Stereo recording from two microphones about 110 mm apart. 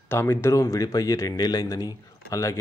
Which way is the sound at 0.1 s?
25° left (ahead or behind).